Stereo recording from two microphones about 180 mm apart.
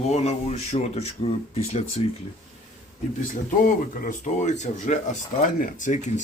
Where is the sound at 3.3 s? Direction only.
45° left (ahead or behind).